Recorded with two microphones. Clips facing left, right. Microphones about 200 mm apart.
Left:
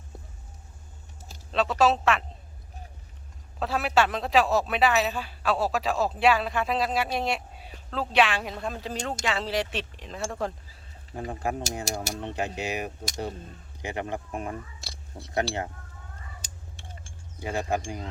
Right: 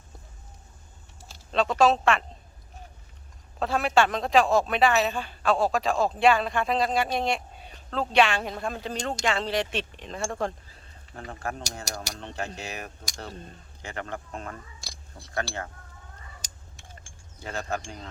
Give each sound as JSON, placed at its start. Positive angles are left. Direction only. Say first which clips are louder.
{"t": 1.8, "sound": "speech", "louder": "right 1 dB", "side_deg": 5}
{"t": 3.6, "sound": "speech", "louder": "right 1 dB", "side_deg": 5}
{"t": 11.1, "sound": "speech", "louder": "left 4 dB", "side_deg": 15}
{"t": 17.4, "sound": "speech", "louder": "left 4 dB", "side_deg": 15}